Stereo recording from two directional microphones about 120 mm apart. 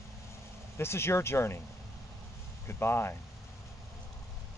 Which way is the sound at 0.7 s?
20° left (ahead or behind).